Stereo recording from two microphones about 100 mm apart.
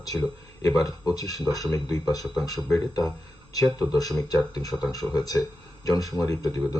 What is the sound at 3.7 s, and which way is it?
Speech, 35° left (ahead or behind).